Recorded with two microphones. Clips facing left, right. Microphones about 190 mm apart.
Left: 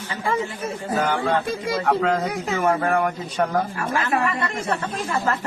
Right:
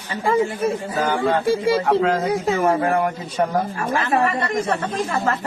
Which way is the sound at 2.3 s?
30° right (ahead or behind).